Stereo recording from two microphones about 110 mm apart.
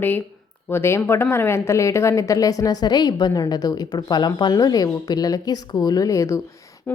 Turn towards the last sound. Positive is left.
turn(degrees=30)  # may be behind; listen again after turning